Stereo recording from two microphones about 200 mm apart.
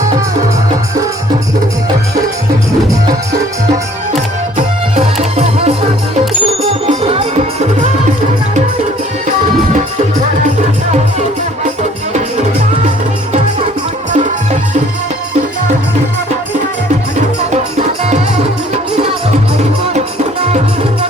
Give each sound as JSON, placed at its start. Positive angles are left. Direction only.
{"t": 4.1, "sound": "music", "side_deg": -35}
{"t": 17.5, "sound": "music", "side_deg": -35}